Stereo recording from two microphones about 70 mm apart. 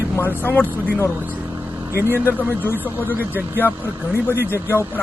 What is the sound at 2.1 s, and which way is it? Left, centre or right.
A man's voice, left.